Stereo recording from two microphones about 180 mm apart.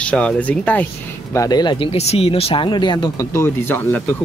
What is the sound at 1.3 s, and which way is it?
Speech, 20° left (ahead or behind).